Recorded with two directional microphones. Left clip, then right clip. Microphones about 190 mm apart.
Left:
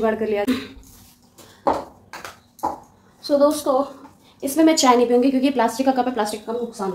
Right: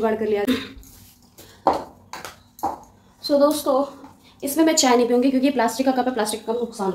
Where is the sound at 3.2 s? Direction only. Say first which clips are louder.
Left 1 dB; 5° left (ahead or behind).